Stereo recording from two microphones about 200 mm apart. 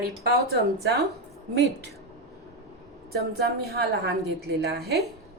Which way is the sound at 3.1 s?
50° right (ahead or behind).